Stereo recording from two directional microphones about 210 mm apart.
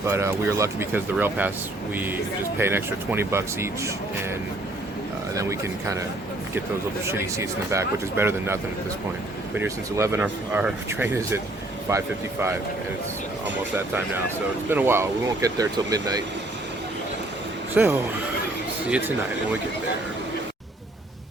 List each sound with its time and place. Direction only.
0.1 s speech: 15° right (ahead or behind)
2.6 s speech: 10° right (ahead or behind)
5.3 s speech: 15° right (ahead or behind)
7.1 s speech: 15° right (ahead or behind)
9.6 s speech: 15° right (ahead or behind)
14.7 s speech: 10° right (ahead or behind)
17.8 s speech: 5° right (ahead or behind)